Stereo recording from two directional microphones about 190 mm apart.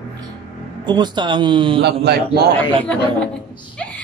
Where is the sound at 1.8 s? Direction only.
60° right (ahead or behind).